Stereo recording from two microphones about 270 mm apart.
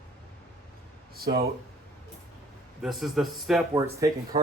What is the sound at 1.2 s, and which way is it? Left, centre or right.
Speech, right.